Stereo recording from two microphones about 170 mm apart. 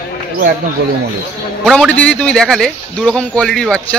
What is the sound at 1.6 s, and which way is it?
Speech, centre (ahead or behind).